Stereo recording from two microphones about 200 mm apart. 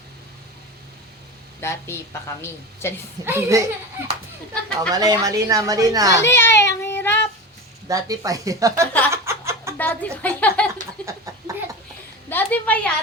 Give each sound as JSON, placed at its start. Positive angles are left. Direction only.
{"t": 1.6, "sound": "a woman's voice", "side_deg": 15}
{"t": 3.2, "sound": "a woman's voice", "side_deg": -15}
{"t": 4.9, "sound": "a woman's voice", "side_deg": -20}
{"t": 6.2, "sound": "child singing", "side_deg": 10}
{"t": 7.9, "sound": "a woman's voice", "side_deg": -15}
{"t": 9.0, "sound": "chuckle", "side_deg": -15}
{"t": 9.7, "sound": "a sound", "side_deg": 10}
{"t": 11.0, "sound": "a sound", "side_deg": -15}
{"t": 12.3, "sound": "a woman's voice", "side_deg": 10}